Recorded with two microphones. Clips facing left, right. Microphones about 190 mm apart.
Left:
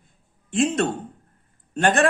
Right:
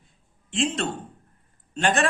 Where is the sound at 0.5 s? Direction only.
50° left (ahead or behind).